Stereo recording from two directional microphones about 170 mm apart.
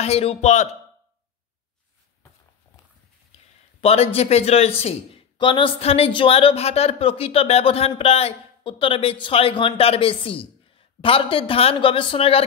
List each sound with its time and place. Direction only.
0.0 s a man's voice: 35° left (ahead or behind)
3.8 s a man's voice: 35° left (ahead or behind)